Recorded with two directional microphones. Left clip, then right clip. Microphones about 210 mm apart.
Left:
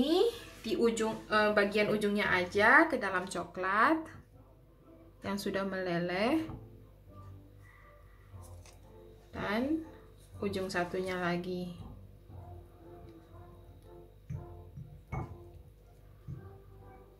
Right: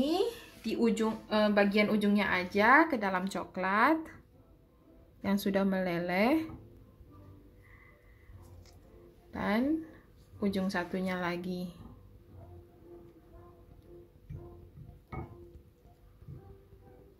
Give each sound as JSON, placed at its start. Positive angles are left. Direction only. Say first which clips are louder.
{"t": 0.7, "sound": "speech", "louder": "even", "side_deg": -40}
{"t": 5.2, "sound": "speech", "louder": "right 4 dB", "side_deg": -35}
{"t": 9.3, "sound": "speech", "louder": "right 2 dB", "side_deg": -35}